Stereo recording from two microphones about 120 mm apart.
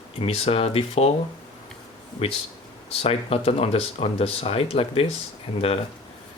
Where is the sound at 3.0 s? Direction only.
55° left (ahead or behind).